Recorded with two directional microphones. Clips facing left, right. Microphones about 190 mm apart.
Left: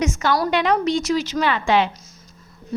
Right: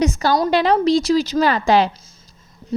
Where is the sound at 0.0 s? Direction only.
35° right (ahead or behind).